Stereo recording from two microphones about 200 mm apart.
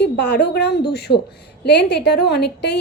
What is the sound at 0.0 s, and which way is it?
A woman's voice, 60° left (ahead or behind).